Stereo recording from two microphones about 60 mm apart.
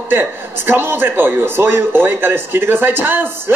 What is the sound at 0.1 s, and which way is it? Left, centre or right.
A man's voice, right.